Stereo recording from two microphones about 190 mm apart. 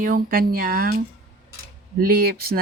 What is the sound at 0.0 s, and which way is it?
Speech, 50° right (ahead or behind).